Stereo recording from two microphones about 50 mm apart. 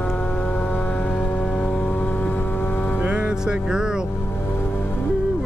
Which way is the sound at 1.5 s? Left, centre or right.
Left.